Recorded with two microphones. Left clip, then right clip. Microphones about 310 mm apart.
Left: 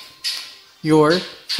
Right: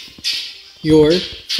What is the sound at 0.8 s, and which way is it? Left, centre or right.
Speech, left.